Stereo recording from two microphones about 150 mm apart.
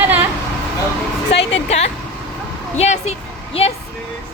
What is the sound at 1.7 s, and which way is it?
Speech, 45° left (ahead or behind).